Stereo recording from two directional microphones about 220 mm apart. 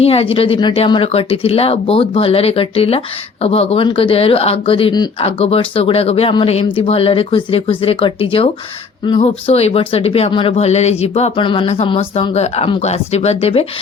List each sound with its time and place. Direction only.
0.0 s speech: 25° left (ahead or behind)